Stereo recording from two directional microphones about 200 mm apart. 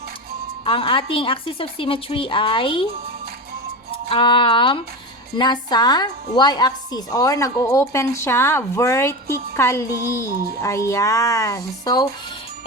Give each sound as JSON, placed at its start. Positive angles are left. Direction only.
{"t": 0.6, "sound": "a woman's voice", "side_deg": 25}
{"t": 4.1, "sound": "a woman's voice", "side_deg": 25}